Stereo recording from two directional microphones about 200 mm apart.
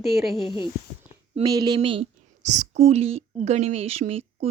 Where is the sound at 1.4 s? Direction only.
20° right (ahead or behind).